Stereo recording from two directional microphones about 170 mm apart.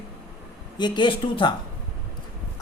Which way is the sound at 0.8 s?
25° left (ahead or behind).